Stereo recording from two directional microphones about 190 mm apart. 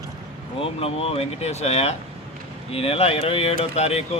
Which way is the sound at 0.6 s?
30° left (ahead or behind).